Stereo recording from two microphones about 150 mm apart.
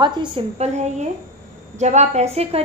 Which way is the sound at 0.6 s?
50° right (ahead or behind).